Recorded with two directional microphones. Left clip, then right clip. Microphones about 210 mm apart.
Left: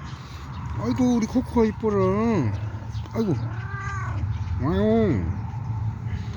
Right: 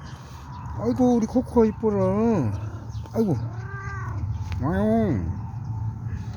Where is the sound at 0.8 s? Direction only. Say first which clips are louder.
Right 2 dB; 25° right (ahead or behind).